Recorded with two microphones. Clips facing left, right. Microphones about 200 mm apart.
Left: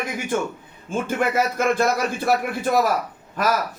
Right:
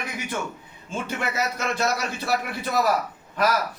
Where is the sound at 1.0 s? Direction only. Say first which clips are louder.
Left 6 dB; 50° left (ahead or behind).